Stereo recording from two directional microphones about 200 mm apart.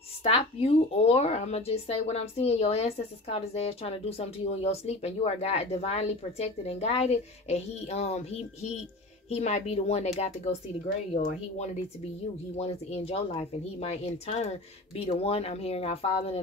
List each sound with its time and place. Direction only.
0.2 s speech: 30° left (ahead or behind)
12.5 s speech: 30° left (ahead or behind)